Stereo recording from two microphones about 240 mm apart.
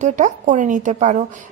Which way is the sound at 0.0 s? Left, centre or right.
Right.